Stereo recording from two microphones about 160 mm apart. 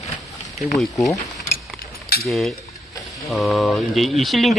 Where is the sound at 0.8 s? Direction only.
Centre (ahead or behind).